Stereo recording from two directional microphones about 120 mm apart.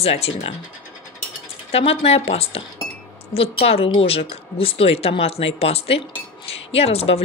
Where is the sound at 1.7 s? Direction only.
55° left (ahead or behind).